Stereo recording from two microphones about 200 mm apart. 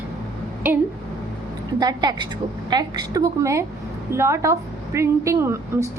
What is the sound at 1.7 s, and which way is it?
A woman's voice, 20° right (ahead or behind).